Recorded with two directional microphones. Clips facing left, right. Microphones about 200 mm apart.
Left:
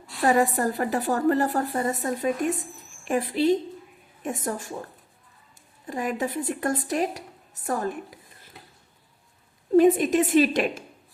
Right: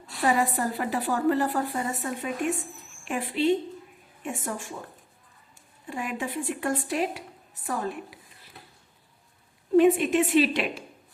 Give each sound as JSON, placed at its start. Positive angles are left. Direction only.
{"t": 0.3, "sound": "a woman's voice", "side_deg": 45}
{"t": 5.9, "sound": "a woman's voice", "side_deg": 40}
{"t": 9.7, "sound": "a woman's voice", "side_deg": 40}